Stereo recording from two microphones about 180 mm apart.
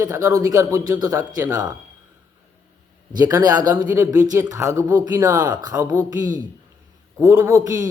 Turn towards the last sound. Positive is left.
turn(degrees=-20)  # may be behind; listen again after turning